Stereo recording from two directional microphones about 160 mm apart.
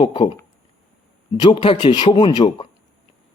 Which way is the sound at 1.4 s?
35° left (ahead or behind).